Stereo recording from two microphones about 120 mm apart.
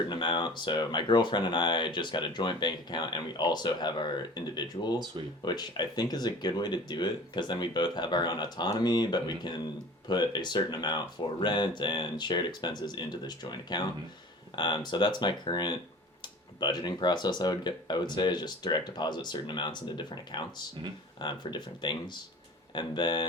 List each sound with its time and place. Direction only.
0.1 s speech: 40° left (ahead or behind)